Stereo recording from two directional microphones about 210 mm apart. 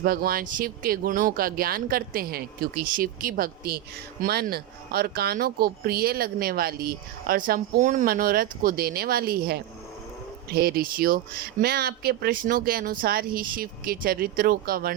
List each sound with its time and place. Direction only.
0.0 s speech: 45° right (ahead or behind)